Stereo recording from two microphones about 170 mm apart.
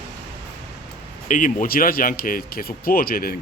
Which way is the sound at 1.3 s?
50° left (ahead or behind).